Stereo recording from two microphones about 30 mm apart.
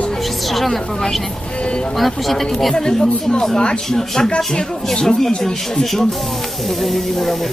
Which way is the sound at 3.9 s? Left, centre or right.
Centre.